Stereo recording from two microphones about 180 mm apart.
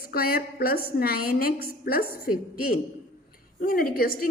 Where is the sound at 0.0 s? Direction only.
55° left (ahead or behind).